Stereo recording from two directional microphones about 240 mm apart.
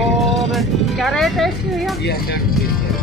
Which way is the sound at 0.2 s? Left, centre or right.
Centre.